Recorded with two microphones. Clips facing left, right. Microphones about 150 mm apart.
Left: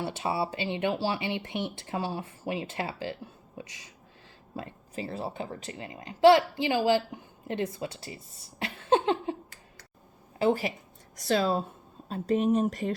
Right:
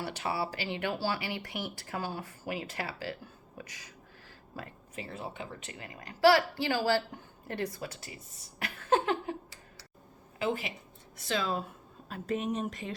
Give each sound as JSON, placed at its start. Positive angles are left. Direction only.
{"t": 0.0, "sound": "a woman's voice", "side_deg": 25}
{"t": 10.3, "sound": "a woman's voice", "side_deg": 35}